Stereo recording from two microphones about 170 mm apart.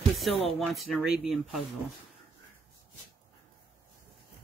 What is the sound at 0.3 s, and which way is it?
Speech, 35° left (ahead or behind).